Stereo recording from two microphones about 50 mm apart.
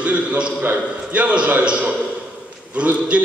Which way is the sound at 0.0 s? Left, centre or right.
Right.